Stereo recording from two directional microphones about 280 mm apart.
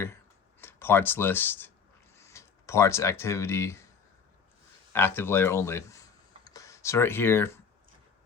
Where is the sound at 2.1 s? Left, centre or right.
Centre.